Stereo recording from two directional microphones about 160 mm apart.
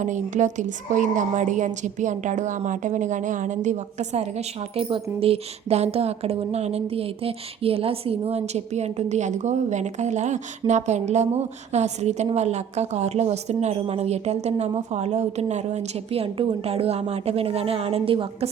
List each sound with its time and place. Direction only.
0.0 s a woman's voice: 50° right (ahead or behind)